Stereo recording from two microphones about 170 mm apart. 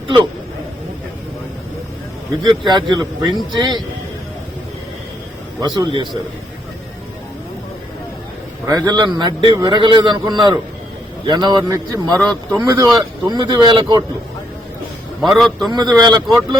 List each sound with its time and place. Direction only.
2.4 s a man's voice: 25° right (ahead or behind)
5.5 s a man's voice: 25° right (ahead or behind)
8.6 s a man's voice: 20° right (ahead or behind)
12.3 s a man's voice: centre (ahead or behind)
12.6 s a man's voice: 20° right (ahead or behind)
15.2 s a man's voice: centre (ahead or behind)
15.7 s a man's voice: 25° right (ahead or behind)